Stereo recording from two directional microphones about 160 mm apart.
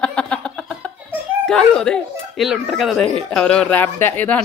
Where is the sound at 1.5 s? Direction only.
5° left (ahead or behind).